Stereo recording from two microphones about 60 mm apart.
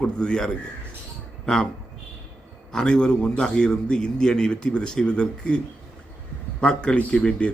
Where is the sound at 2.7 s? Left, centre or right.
Centre.